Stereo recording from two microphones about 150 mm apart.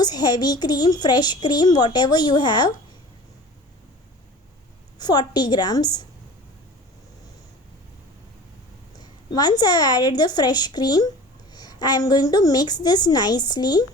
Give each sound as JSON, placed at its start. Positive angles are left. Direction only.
{"t": 0.0, "sound": "a woman's voice", "side_deg": 25}
{"t": 4.9, "sound": "a woman's voice", "side_deg": 25}
{"t": 9.0, "sound": "a woman's voice", "side_deg": 25}